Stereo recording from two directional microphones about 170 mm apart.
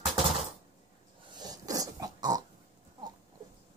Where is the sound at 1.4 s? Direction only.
20° right (ahead or behind).